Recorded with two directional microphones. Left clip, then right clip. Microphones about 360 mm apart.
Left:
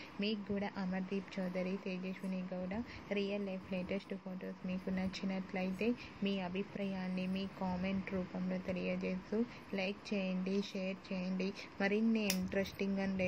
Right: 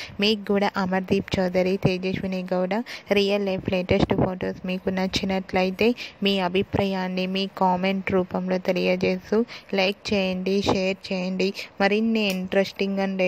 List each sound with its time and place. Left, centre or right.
0.2 s a woman's voice: right